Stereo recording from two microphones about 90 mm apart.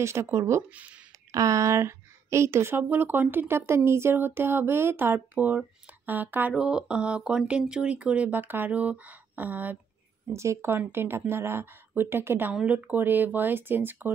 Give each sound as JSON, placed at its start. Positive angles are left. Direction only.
{"t": 0.0, "sound": "a woman's voice", "side_deg": -30}
{"t": 6.5, "sound": "speech", "side_deg": -10}
{"t": 10.3, "sound": "a woman's voice", "side_deg": -30}